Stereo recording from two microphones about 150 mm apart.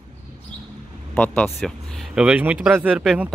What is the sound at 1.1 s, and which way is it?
Speech, 10° left (ahead or behind).